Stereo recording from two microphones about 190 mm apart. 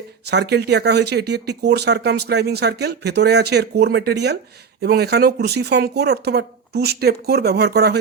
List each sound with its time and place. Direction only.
0.3 s speech: 60° right (ahead or behind)